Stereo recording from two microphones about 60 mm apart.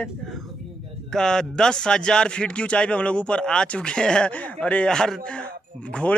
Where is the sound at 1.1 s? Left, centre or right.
Centre.